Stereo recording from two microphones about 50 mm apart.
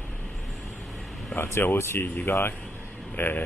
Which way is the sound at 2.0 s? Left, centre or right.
Left.